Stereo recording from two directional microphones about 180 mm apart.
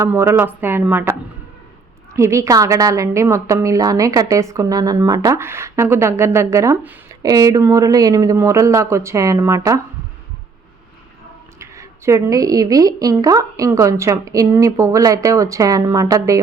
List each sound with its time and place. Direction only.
0.0 s speech: 15° right (ahead or behind)
2.1 s speech: 15° right (ahead or behind)
11.6 s speech: 15° right (ahead or behind)